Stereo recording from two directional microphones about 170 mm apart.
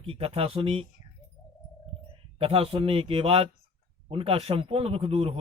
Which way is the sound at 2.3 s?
35° right (ahead or behind).